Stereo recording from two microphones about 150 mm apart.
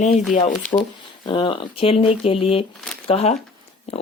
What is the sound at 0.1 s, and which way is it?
Speech, centre (ahead or behind).